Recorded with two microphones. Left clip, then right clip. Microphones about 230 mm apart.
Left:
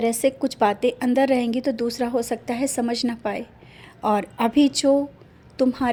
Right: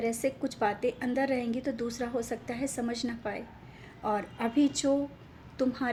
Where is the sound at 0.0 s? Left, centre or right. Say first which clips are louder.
Left 10 dB; left.